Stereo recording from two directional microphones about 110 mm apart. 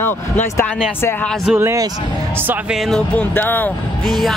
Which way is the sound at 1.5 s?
25° right (ahead or behind).